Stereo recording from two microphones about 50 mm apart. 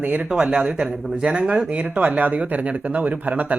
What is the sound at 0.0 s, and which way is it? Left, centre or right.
Speech, right.